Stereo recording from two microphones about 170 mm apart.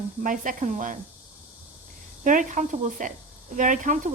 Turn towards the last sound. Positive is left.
turn(degrees=-50)  # may be behind; listen again after turning